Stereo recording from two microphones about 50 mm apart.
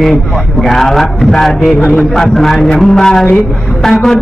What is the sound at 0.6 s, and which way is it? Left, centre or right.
A man's voice, centre.